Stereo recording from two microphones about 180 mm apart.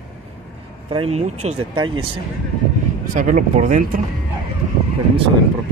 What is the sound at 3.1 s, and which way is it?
Speech, 45° right (ahead or behind).